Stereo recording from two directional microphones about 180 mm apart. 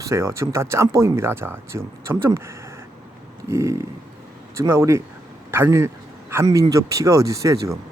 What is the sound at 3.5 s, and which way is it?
A man's voice, 15° right (ahead or behind).